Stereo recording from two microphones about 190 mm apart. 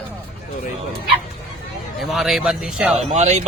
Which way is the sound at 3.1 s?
35° right (ahead or behind).